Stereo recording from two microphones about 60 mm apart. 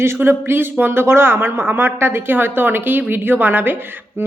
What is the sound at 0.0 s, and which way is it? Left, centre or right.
Speech, right.